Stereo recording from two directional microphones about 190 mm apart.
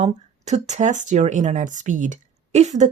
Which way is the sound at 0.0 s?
35° right (ahead or behind).